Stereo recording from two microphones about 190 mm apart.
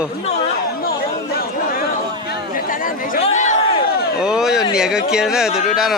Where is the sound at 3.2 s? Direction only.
40° left (ahead or behind).